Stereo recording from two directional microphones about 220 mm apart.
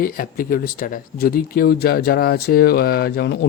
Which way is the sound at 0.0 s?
40° left (ahead or behind).